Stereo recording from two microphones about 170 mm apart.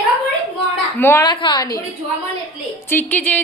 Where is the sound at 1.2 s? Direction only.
25° left (ahead or behind).